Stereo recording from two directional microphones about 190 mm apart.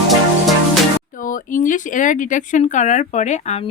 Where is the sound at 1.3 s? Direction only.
45° left (ahead or behind).